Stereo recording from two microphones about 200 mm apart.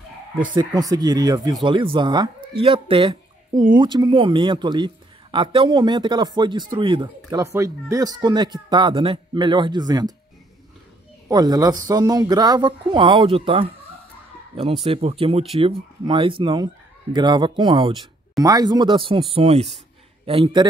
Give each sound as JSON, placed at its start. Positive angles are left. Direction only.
{"t": 0.6, "sound": "speech", "side_deg": -20}
{"t": 11.2, "sound": "speech", "side_deg": -20}
{"t": 14.9, "sound": "speech", "side_deg": -30}